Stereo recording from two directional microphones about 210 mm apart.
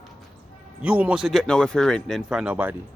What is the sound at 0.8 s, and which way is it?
Speech, 5° right (ahead or behind).